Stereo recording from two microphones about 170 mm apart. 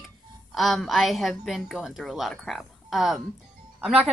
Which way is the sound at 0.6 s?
Centre (ahead or behind).